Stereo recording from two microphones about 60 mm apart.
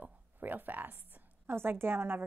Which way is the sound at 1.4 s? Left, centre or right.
Right.